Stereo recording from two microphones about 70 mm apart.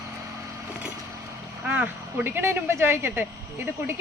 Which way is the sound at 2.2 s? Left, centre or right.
Right.